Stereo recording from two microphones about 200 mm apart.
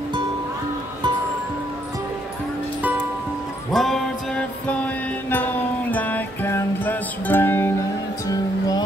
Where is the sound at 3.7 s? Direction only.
Centre (ahead or behind); by 8.8 s 20° left (ahead or behind).